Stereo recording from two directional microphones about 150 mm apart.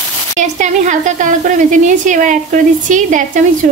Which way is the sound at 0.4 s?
55° right (ahead or behind).